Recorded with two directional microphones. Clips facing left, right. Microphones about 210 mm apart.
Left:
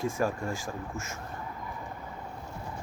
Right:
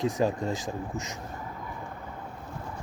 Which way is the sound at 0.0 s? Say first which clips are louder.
Right 3 dB; 20° right (ahead or behind).